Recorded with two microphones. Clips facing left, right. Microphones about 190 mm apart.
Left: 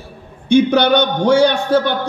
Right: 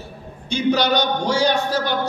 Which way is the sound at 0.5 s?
60° left (ahead or behind).